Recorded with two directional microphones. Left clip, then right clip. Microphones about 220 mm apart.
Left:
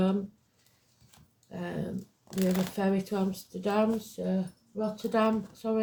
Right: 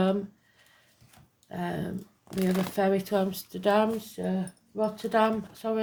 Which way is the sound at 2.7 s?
45° right (ahead or behind).